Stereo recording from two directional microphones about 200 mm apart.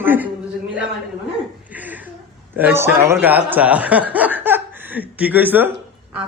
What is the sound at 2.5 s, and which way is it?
Speech, 10° right (ahead or behind).